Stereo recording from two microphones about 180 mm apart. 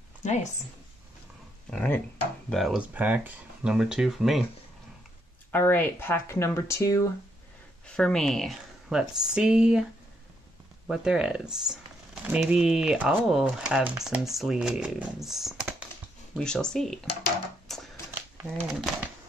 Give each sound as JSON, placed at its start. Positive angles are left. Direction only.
{"t": 0.2, "sound": "speech", "side_deg": 40}
{"t": 1.7, "sound": "speech", "side_deg": 10}
{"t": 5.5, "sound": "speech", "side_deg": 10}
{"t": 7.8, "sound": "speech", "side_deg": 5}
{"t": 10.9, "sound": "speech", "side_deg": -5}
{"t": 17.6, "sound": "typewriter", "side_deg": 0}
{"t": 18.4, "sound": "speech", "side_deg": -5}